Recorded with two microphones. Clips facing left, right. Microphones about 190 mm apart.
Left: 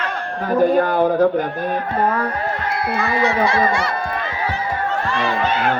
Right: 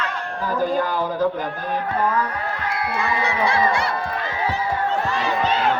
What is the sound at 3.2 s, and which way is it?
Speech, 60° left (ahead or behind).